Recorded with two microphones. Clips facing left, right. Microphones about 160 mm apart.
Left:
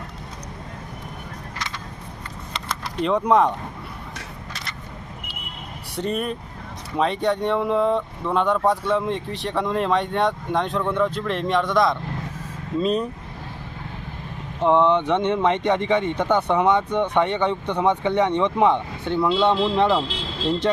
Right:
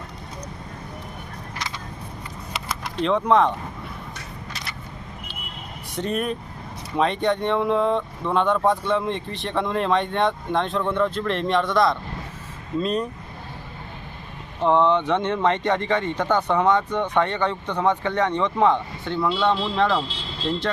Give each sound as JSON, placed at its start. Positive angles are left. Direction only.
{"t": 3.0, "sound": "speech", "side_deg": 10}
{"t": 6.0, "sound": "speech", "side_deg": 0}
{"t": 14.6, "sound": "speech", "side_deg": 15}